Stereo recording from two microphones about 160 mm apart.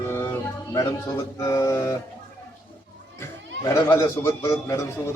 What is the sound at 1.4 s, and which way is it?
Speech, 20° left (ahead or behind).